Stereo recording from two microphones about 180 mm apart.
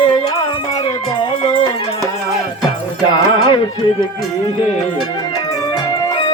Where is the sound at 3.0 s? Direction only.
25° left (ahead or behind).